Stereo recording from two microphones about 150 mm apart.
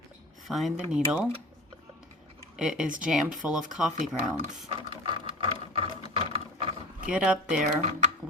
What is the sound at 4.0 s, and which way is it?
Speech, 55° right (ahead or behind).